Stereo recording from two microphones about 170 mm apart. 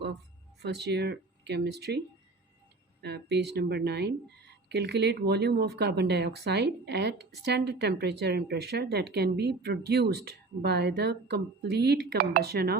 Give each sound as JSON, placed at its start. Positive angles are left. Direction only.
{"t": 0.6, "sound": "speech", "side_deg": -80}
{"t": 3.0, "sound": "speech", "side_deg": -75}